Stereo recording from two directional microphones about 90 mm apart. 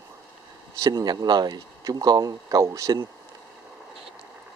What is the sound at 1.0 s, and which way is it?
Speech, 50° right (ahead or behind).